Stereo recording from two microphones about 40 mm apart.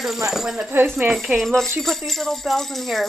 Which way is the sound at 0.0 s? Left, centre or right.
Centre.